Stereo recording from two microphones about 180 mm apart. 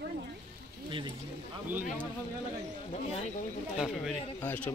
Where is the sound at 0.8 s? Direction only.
25° right (ahead or behind).